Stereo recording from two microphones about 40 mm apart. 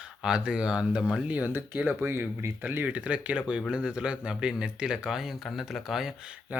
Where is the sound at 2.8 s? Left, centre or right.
Right; by 5.3 s centre.